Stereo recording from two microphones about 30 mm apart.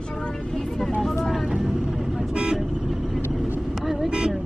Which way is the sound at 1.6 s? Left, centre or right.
Centre.